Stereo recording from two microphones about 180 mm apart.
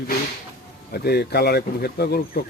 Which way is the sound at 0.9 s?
60° left (ahead or behind).